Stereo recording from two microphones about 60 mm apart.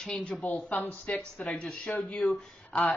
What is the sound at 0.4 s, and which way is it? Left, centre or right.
Speech, left.